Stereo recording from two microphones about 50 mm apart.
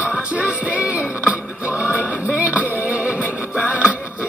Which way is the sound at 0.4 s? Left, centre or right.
Right.